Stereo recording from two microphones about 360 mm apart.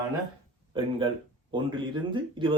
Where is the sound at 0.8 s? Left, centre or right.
Centre.